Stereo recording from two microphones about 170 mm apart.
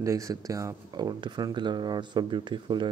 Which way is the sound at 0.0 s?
20° right (ahead or behind).